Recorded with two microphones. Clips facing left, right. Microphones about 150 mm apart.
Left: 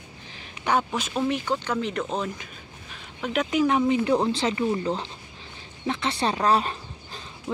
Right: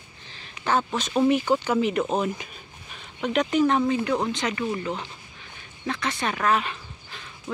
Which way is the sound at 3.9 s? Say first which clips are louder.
Left 3 dB; 25° left (ahead or behind).